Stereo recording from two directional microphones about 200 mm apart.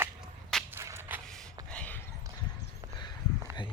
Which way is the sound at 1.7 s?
5° left (ahead or behind).